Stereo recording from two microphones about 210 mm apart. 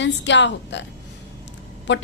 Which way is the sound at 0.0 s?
60° left (ahead or behind).